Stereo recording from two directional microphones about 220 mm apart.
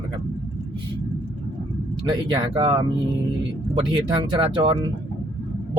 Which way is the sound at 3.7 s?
20° right (ahead or behind).